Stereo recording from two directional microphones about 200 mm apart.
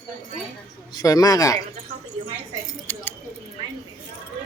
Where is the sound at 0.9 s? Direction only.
20° left (ahead or behind).